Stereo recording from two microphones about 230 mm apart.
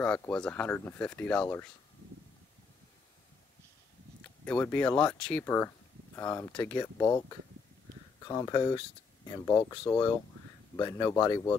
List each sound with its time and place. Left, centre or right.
0.0 s speech: centre
4.2 s speech: centre
9.5 s speech: centre